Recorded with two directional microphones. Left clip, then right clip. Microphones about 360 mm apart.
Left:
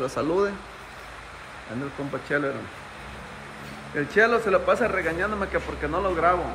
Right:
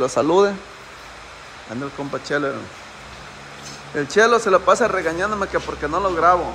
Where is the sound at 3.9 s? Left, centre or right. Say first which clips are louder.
Right 5 dB; centre.